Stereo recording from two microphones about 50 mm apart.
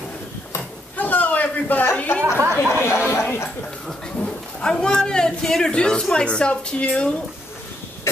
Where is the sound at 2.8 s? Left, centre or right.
Left.